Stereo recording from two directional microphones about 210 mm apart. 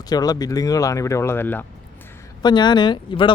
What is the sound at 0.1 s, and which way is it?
Speech, 20° left (ahead or behind).